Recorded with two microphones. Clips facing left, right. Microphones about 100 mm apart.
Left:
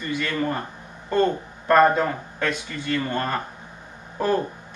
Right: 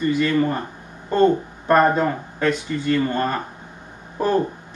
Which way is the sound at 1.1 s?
25° right (ahead or behind).